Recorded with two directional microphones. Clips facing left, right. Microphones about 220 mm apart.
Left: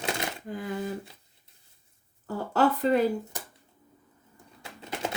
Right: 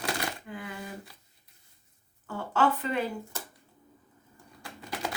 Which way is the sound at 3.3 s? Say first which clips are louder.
Even; 15° left (ahead or behind).